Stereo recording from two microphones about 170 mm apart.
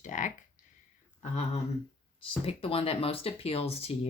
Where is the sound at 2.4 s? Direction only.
35° left (ahead or behind).